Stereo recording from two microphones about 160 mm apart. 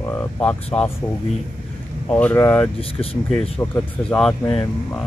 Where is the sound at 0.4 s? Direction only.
5° left (ahead or behind).